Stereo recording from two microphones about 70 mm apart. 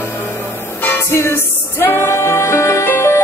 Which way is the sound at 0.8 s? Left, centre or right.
Left.